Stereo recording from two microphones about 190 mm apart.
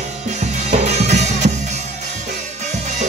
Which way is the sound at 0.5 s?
35° right (ahead or behind).